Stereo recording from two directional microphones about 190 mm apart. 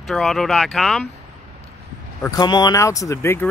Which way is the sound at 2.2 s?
20° left (ahead or behind).